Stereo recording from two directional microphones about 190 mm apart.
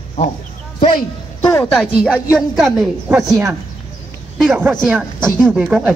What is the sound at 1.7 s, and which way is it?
Speech, 5° right (ahead or behind).